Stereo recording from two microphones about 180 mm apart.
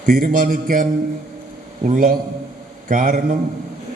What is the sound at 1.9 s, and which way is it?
A man's voice, 50° right (ahead or behind).